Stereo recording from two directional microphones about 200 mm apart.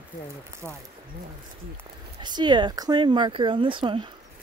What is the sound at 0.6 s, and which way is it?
Speech, 10° left (ahead or behind).